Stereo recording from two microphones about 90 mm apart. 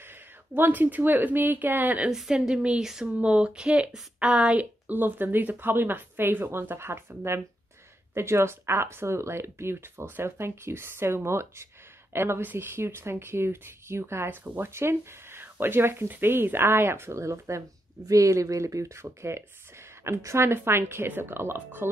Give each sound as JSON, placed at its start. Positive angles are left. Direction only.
{"t": 0.6, "sound": "speech", "side_deg": -20}
{"t": 2.0, "sound": "a woman's voice", "side_deg": -5}